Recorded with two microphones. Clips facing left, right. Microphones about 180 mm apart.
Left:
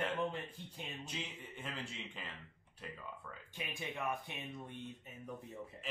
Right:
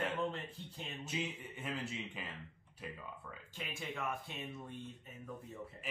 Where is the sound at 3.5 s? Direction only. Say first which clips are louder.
Even; 15° left (ahead or behind).